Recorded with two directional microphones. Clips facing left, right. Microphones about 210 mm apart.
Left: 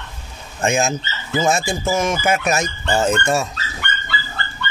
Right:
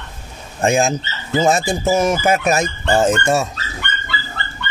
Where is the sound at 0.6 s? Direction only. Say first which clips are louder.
Right 3 dB; 35° right (ahead or behind).